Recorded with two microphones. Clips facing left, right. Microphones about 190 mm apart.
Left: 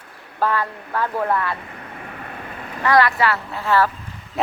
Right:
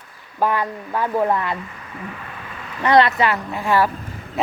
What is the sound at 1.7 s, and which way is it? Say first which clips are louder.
Vehicle: right 1 dB; 55° left (ahead or behind).